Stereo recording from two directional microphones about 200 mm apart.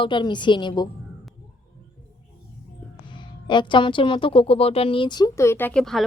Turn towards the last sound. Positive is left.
turn(degrees=0)  # may be behind; listen again after turning